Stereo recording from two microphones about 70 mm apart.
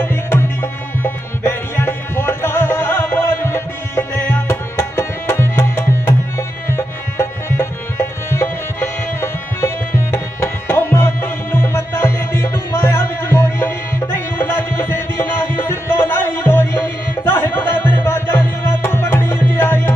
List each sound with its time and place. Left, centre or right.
0.0 s music: left